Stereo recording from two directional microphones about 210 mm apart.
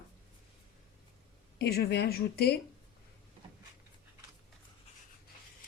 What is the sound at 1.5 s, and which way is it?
A woman's voice, 50° left (ahead or behind).